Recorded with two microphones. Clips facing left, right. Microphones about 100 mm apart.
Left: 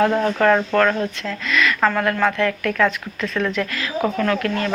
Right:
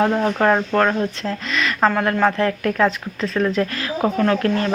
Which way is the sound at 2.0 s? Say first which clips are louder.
Right 1 dB; 25° right (ahead or behind).